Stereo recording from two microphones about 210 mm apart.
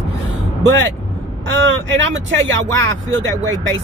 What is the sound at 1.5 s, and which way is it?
Speech, 60° right (ahead or behind).